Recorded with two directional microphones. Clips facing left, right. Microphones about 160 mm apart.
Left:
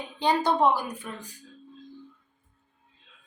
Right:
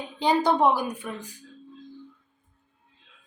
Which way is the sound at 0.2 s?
15° right (ahead or behind).